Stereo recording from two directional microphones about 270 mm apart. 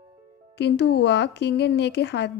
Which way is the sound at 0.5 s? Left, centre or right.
Left.